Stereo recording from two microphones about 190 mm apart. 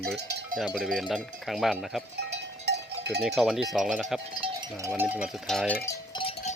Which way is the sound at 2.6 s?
60° right (ahead or behind).